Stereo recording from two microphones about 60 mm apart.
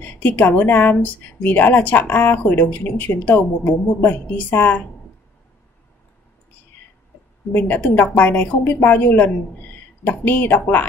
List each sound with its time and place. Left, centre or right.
0.0 s speech: left
7.5 s speech: left